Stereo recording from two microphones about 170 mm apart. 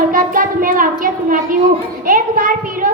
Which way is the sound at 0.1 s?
55° right (ahead or behind).